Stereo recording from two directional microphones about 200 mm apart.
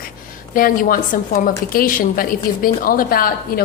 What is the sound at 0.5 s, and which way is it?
A woman's voice, 45° left (ahead or behind).